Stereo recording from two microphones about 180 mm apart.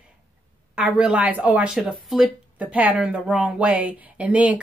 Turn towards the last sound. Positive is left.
turn(degrees=-5)  # may be behind; listen again after turning